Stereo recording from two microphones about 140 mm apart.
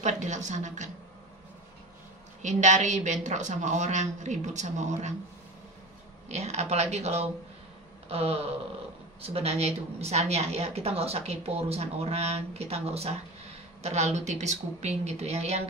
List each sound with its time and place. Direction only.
0.0 s a woman's voice: 60° right (ahead or behind)
2.4 s a woman's voice: 60° right (ahead or behind)
6.2 s a woman's voice: 50° right (ahead or behind)